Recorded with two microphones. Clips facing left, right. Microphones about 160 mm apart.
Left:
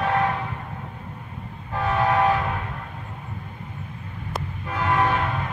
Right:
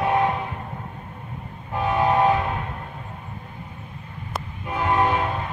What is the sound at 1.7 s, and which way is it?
Train, 20° right (ahead or behind).